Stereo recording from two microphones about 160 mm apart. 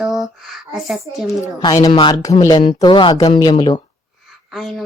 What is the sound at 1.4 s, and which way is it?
A woman's voice, 20° left (ahead or behind).